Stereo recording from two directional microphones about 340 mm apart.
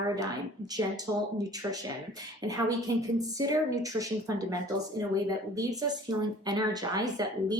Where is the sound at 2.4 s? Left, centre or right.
Centre.